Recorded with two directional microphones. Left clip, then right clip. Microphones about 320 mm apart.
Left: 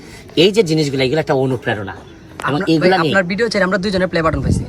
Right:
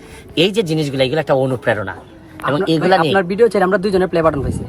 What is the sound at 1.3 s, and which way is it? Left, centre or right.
Speech, centre.